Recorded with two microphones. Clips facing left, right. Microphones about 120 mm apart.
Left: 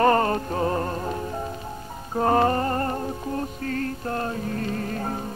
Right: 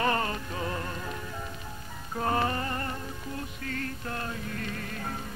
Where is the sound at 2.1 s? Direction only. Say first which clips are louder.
Left 8 dB; 40° left (ahead or behind).